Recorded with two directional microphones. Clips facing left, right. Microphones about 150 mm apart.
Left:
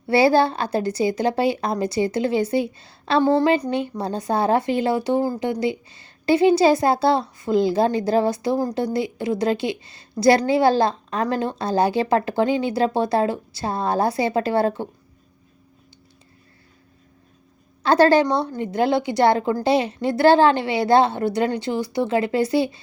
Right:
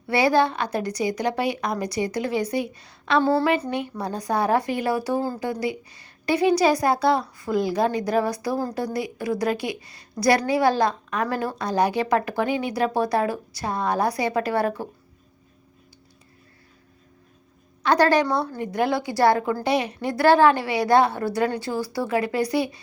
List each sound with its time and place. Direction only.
0.1 s a woman's voice: 30° left (ahead or behind)
17.8 s a woman's voice: 30° left (ahead or behind)